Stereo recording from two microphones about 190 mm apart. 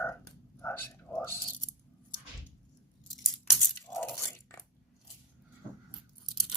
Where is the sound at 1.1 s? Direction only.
10° left (ahead or behind).